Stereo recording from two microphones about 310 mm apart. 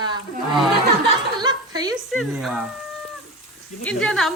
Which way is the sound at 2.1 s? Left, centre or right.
Centre.